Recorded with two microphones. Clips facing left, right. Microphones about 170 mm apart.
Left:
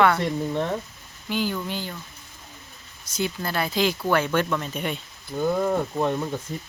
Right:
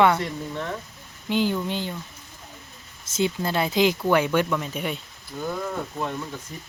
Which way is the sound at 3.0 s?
25° right (ahead or behind).